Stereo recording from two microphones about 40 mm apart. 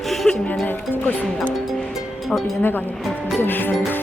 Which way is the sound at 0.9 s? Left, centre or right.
Left.